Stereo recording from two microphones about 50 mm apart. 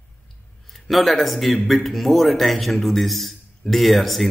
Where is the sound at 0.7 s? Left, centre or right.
Centre.